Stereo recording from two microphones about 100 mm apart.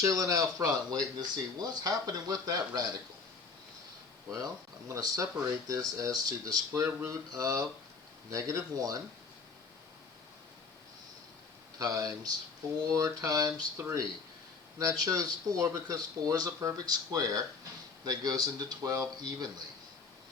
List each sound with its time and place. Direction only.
0.0 s speech: 30° right (ahead or behind)
4.9 s speech: 35° right (ahead or behind)
11.8 s speech: 35° right (ahead or behind)